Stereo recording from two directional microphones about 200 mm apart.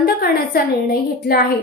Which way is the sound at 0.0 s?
50° left (ahead or behind).